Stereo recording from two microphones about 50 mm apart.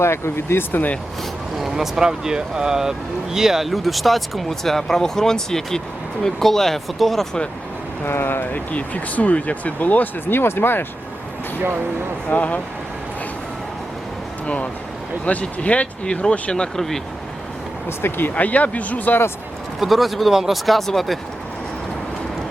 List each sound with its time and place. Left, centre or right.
0.0 s speech: left
0.7 s speech: left
1.5 s speech: centre
8.0 s speech: left
8.5 s speech: left
12.3 s speech: left
14.4 s speech: left; by 17.0 s centre
17.8 s speech: left
18.3 s speech: left
19.8 s speech: centre